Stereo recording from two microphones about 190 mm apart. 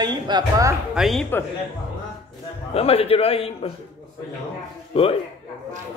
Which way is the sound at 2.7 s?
30° left (ahead or behind).